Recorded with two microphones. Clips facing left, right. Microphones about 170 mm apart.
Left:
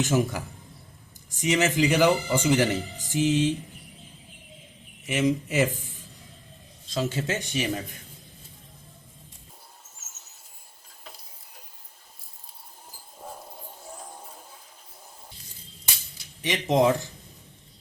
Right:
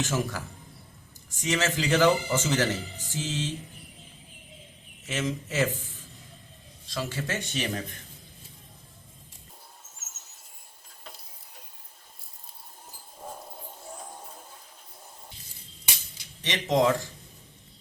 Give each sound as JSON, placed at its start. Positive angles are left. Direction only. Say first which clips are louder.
{"t": 0.0, "sound": "speech", "louder": "left 5 dB", "side_deg": 20}
{"t": 5.0, "sound": "speech", "louder": "left 7 dB", "side_deg": 15}
{"t": 6.9, "sound": "speech", "louder": "left 4 dB", "side_deg": 20}
{"t": 13.2, "sound": "a sound", "louder": "even", "side_deg": 0}
{"t": 16.4, "sound": "speech", "louder": "left 2 dB", "side_deg": 15}